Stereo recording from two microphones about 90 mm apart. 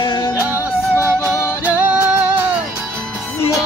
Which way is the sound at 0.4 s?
20° right (ahead or behind).